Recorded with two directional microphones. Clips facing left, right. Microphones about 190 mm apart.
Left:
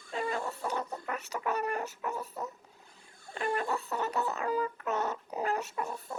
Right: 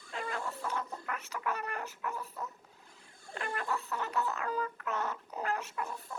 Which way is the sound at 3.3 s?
20° left (ahead or behind).